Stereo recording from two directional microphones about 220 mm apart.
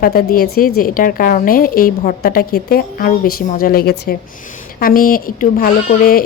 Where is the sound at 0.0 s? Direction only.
40° left (ahead or behind).